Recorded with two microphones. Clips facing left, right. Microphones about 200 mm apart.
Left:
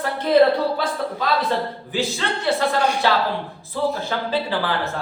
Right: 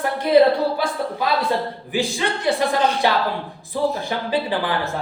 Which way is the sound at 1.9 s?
15° right (ahead or behind).